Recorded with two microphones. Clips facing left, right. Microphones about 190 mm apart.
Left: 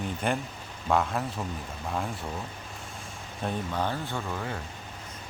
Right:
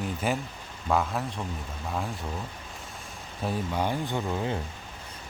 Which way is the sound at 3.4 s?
10° right (ahead or behind).